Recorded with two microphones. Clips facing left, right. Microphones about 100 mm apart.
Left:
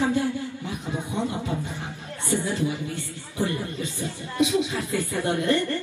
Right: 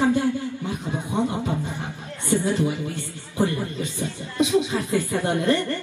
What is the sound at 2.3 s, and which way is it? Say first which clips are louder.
A woman's voice: right 4 dB; 20° right (ahead or behind).